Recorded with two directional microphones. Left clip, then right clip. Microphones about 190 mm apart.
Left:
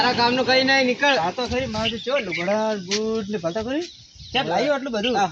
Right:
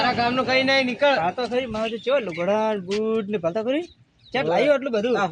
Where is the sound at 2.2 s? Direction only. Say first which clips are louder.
Left 1 dB; 40° right (ahead or behind).